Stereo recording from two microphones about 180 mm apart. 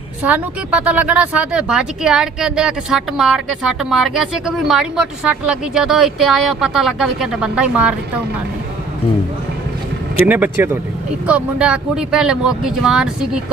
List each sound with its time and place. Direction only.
0.2 s speech: 10° right (ahead or behind)
10.2 s speech: 10° right (ahead or behind)